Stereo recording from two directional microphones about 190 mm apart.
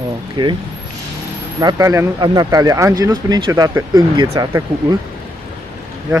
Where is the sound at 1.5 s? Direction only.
20° right (ahead or behind).